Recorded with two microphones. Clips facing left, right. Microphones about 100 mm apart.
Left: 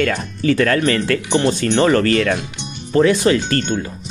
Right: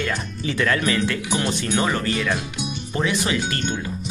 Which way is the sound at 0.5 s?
50° left (ahead or behind).